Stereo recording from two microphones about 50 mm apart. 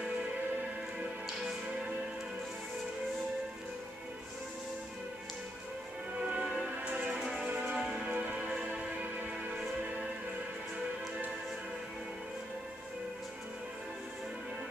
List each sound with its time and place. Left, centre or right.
6.1 s music: right
8.1 s music: right
8.4 s music: centre